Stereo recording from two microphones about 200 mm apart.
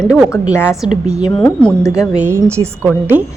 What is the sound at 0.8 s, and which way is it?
A woman's voice, 5° right (ahead or behind).